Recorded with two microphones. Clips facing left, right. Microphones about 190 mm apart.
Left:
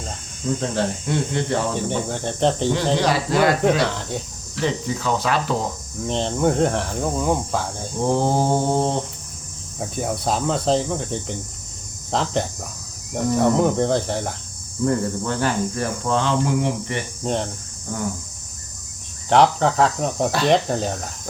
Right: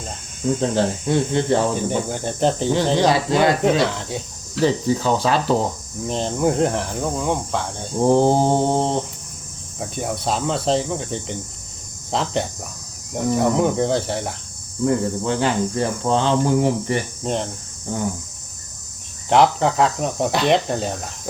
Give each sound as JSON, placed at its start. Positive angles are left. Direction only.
{"t": 0.6, "sound": "speech", "side_deg": -30}
{"t": 1.7, "sound": "speech", "side_deg": -5}
{"t": 2.9, "sound": "speech", "side_deg": -30}
{"t": 3.8, "sound": "speech", "side_deg": 0}
{"t": 4.6, "sound": "speech", "side_deg": -30}
{"t": 6.1, "sound": "speech", "side_deg": 0}
{"t": 8.0, "sound": "speech", "side_deg": -30}
{"t": 9.8, "sound": "speech", "side_deg": 0}
{"t": 14.8, "sound": "speech", "side_deg": -20}
{"t": 17.2, "sound": "speech", "side_deg": 0}
{"t": 17.9, "sound": "speech", "side_deg": -20}
{"t": 19.3, "sound": "speech", "side_deg": 0}